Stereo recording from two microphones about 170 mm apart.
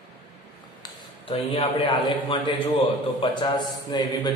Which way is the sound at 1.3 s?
30° left (ahead or behind).